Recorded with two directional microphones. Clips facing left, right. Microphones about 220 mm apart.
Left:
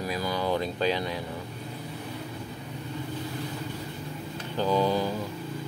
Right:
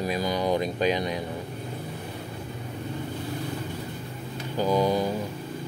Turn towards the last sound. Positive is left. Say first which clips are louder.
# right 2 dB
turn(degrees=-15)  # may be behind; listen again after turning